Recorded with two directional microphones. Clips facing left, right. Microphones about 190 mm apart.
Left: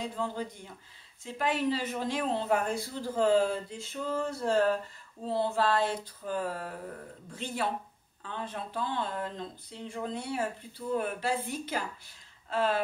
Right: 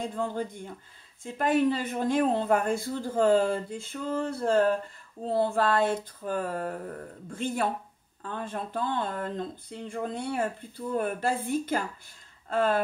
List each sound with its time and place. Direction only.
0.0 s speech: 50° right (ahead or behind)